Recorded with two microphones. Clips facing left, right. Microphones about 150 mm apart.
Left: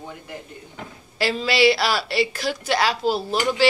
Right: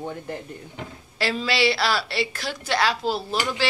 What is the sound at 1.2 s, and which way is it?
Speech, 5° left (ahead or behind).